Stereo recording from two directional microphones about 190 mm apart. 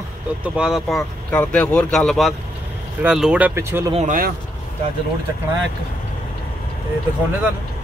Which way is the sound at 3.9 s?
45° right (ahead or behind).